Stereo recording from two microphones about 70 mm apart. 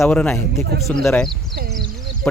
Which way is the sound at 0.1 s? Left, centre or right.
Centre.